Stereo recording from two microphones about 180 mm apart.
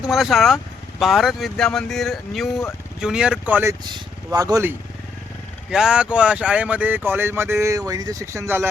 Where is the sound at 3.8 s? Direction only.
20° right (ahead or behind).